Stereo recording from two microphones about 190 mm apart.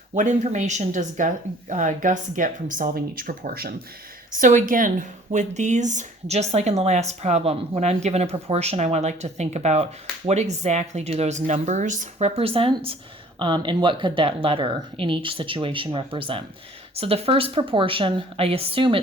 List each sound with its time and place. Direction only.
0.2 s a woman's voice: 40° right (ahead or behind)